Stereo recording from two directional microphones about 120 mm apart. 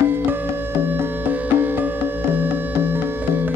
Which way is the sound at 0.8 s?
15° right (ahead or behind).